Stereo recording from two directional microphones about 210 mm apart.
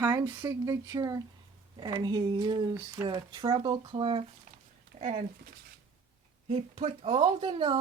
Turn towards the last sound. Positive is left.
turn(degrees=-25)  # may be behind; listen again after turning